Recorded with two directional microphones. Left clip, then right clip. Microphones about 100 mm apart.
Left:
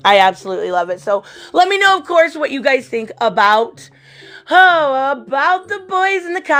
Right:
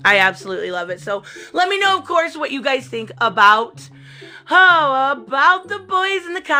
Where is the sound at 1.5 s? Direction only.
75° left (ahead or behind); by 3.7 s 45° left (ahead or behind).